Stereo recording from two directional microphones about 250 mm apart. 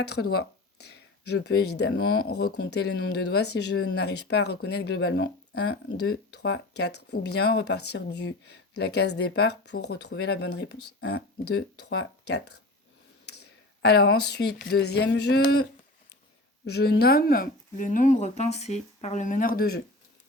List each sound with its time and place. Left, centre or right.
0.0 s a sound: left
1.5 s speech: left
16.6 s speech: left